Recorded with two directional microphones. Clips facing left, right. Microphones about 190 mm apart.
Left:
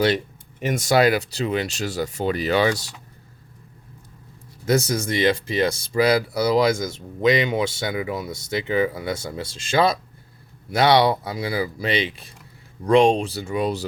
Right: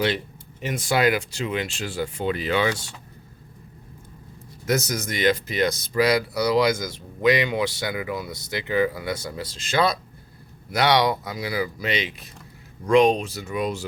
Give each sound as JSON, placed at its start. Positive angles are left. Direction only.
{"t": 0.6, "sound": "speech", "side_deg": 45}
{"t": 4.6, "sound": "speech", "side_deg": 30}
{"t": 10.7, "sound": "speech", "side_deg": 30}